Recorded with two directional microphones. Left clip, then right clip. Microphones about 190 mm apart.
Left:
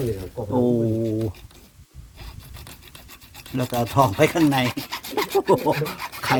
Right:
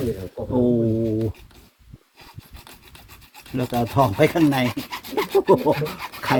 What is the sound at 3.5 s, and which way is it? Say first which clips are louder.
Speech: even; 10° left (ahead or behind).